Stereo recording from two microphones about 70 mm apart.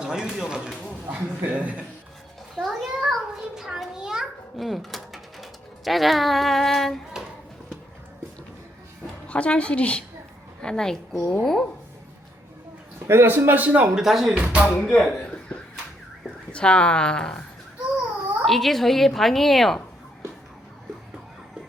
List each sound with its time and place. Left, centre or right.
0.0 s speech: centre
1.0 s speech: right
2.6 s a child's voice: centre
9.2 s a woman's voice: centre
13.1 s speech: right
13.9 s a woman's voice: centre
14.3 s speech: centre
14.8 s a woman's voice: centre
16.5 s a woman's voice: centre
18.4 s a woman's voice: centre